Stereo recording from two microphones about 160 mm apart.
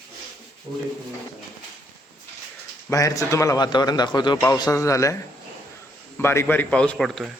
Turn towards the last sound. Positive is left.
turn(degrees=0)  # may be behind; listen again after turning